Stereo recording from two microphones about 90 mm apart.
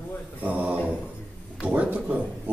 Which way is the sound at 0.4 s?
15° right (ahead or behind).